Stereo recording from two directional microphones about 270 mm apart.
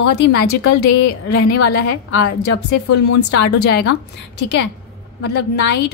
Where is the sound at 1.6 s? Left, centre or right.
Left.